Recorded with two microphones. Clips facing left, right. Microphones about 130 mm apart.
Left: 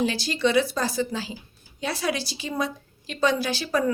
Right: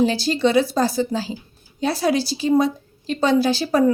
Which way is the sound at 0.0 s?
35° right (ahead or behind).